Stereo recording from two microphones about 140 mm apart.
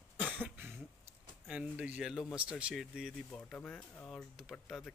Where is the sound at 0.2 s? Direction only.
10° right (ahead or behind).